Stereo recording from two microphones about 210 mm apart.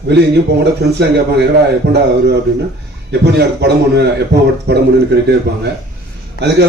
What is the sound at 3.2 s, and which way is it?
A man's voice, 50° right (ahead or behind).